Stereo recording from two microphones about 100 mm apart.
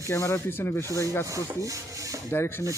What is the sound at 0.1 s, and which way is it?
Speech, 30° left (ahead or behind).